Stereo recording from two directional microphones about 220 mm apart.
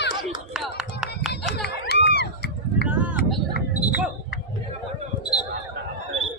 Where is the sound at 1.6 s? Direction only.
50° left (ahead or behind).